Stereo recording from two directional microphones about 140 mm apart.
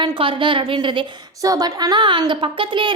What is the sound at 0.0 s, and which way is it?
A woman's voice, 35° right (ahead or behind).